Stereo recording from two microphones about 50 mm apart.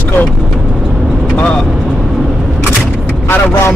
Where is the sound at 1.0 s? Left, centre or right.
Centre.